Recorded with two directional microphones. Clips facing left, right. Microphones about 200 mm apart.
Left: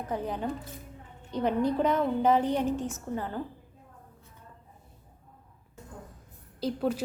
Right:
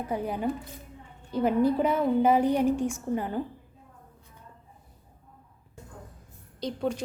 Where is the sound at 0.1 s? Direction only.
10° right (ahead or behind).